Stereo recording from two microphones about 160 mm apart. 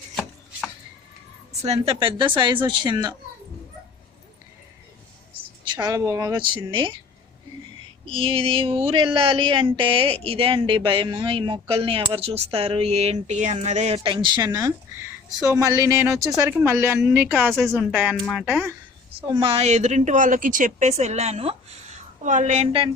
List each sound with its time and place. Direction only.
1.6 s speech: 40° right (ahead or behind); by 3.2 s 25° right (ahead or behind)
5.6 s speech: 25° right (ahead or behind)
8.0 s a woman's voice: 35° right (ahead or behind); by 17.5 s 10° right (ahead or behind)
17.5 s speech: centre (ahead or behind)
19.4 s speech: 40° right (ahead or behind)